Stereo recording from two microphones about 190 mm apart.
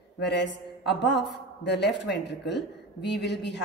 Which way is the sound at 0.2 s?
65° left (ahead or behind).